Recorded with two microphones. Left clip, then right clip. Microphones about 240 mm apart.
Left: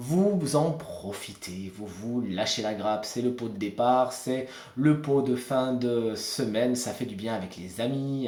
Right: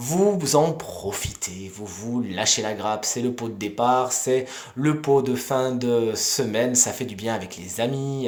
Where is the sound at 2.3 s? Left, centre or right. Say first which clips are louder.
Right 6 dB; right.